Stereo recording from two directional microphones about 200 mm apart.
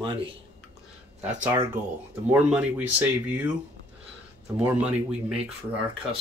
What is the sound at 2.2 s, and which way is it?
Speech, 5° right (ahead or behind).